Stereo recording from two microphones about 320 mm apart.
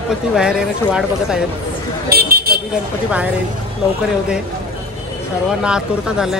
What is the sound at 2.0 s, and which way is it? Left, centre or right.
Vehicle, right.